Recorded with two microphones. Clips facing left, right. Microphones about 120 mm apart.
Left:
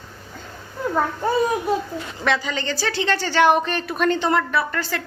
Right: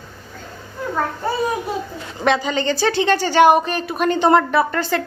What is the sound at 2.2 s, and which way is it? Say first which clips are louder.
A woman's voice: right 5 dB; 20° right (ahead or behind).